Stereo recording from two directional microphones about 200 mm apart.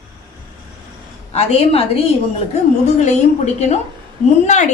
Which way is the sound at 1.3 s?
30° left (ahead or behind).